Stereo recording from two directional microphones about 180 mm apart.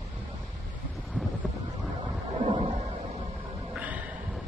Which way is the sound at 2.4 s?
35° right (ahead or behind).